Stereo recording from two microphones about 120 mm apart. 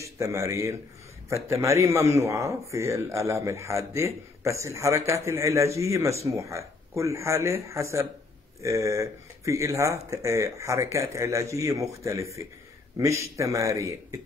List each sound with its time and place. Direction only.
0.0 s a man's voice: 25° right (ahead or behind)